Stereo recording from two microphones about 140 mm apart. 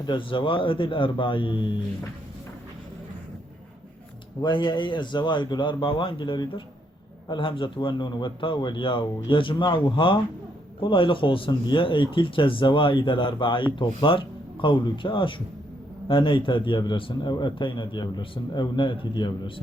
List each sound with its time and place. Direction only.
0.0 s a man's voice: 35° left (ahead or behind)
4.4 s a man's voice: 35° left (ahead or behind)